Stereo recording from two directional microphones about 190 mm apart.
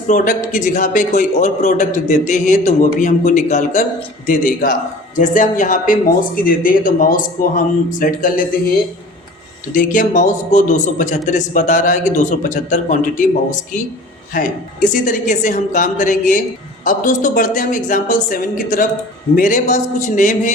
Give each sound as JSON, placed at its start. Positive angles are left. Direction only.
{"t": 0.1, "sound": "speech", "side_deg": 40}
{"t": 9.7, "sound": "speech", "side_deg": 45}